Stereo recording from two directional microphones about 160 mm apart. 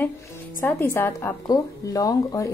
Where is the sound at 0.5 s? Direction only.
15° left (ahead or behind).